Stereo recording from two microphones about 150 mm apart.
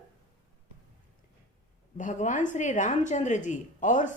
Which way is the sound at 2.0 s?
55° left (ahead or behind).